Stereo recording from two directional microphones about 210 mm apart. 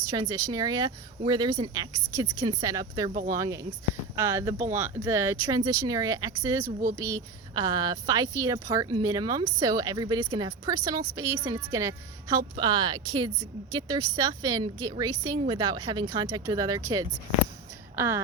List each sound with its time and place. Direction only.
0.1 s a woman's voice: 20° right (ahead or behind)
3.1 s speech: 40° right (ahead or behind)
3.3 s a woman's voice: 15° right (ahead or behind)